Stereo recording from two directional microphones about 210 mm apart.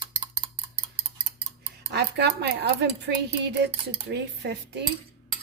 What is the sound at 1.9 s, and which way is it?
Speech, 50° right (ahead or behind).